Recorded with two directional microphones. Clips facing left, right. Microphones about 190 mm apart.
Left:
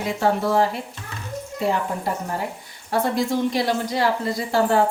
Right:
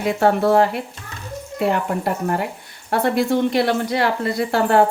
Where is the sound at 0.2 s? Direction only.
60° right (ahead or behind).